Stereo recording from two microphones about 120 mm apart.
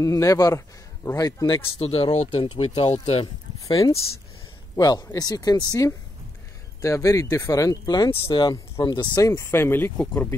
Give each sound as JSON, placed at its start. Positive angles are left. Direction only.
{"t": 0.0, "sound": "a man's voice", "side_deg": 30}
{"t": 1.8, "sound": "speech", "side_deg": 55}
{"t": 2.9, "sound": "speech", "side_deg": 60}
{"t": 3.6, "sound": "a man's voice", "side_deg": 30}
{"t": 9.3, "sound": "speech", "side_deg": 20}